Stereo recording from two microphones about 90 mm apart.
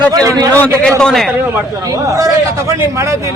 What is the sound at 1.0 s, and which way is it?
Speech, 5° left (ahead or behind).